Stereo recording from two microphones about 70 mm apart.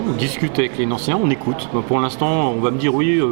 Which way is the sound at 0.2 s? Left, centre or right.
Centre.